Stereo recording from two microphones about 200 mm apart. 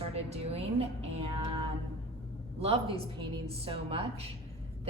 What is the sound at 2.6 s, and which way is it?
A woman's voice, 30° right (ahead or behind).